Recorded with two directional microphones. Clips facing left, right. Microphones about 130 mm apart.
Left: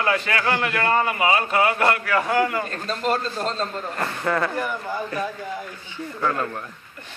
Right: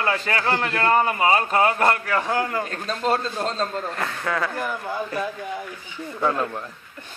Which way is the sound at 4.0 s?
Centre (ahead or behind).